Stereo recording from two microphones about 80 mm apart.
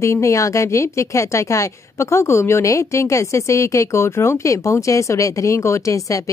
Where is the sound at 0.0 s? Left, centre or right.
Left.